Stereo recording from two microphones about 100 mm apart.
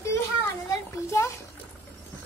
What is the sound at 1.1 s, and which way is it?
Speech, 30° left (ahead or behind).